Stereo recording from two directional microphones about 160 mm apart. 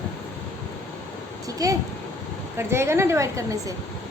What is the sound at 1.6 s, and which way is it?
A woman's voice, 20° right (ahead or behind).